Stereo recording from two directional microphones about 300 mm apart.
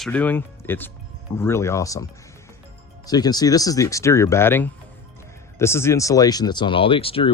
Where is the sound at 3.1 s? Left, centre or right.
Centre.